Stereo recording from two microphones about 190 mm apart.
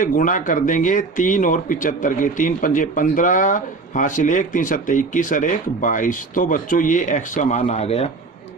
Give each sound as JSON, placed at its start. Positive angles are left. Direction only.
{"t": 0.0, "sound": "speech", "side_deg": 45}